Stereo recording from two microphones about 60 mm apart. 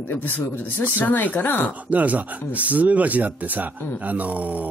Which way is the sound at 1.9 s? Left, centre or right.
Right.